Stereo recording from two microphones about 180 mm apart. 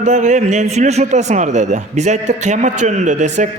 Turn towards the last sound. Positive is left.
turn(degrees=-40)  # may be behind; listen again after turning